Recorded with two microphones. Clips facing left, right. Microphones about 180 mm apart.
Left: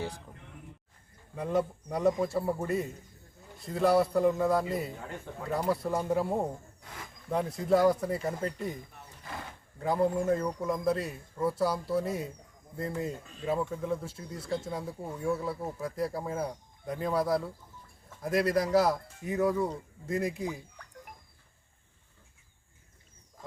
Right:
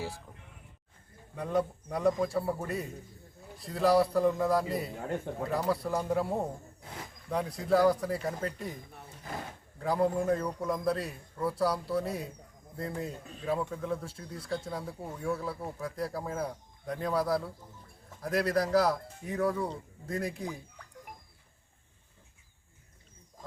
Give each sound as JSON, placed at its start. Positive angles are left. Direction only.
{"t": 1.4, "sound": "speech", "side_deg": 5}
{"t": 4.9, "sound": "speech", "side_deg": -50}
{"t": 5.6, "sound": "speech", "side_deg": 0}
{"t": 9.8, "sound": "speech", "side_deg": 0}
{"t": 14.4, "sound": "speech", "side_deg": 25}
{"t": 14.7, "sound": "speech", "side_deg": 5}